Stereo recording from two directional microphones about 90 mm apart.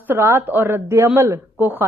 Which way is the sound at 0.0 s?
25° right (ahead or behind).